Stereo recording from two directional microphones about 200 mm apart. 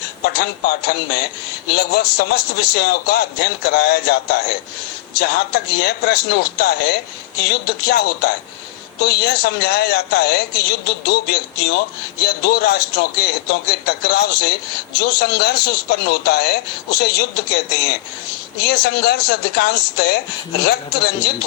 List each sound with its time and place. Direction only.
0.3 s a man's voice: 55° left (ahead or behind)